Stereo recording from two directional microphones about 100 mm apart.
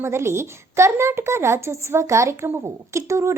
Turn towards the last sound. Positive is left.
turn(degrees=-30)  # may be behind; listen again after turning